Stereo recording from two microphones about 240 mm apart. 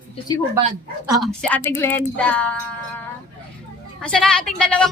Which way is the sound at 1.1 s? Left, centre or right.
Centre.